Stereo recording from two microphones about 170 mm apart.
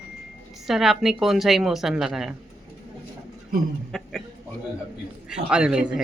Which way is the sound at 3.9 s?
Centre (ahead or behind).